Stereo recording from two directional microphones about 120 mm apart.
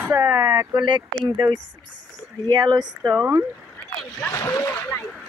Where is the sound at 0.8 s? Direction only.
40° right (ahead or behind).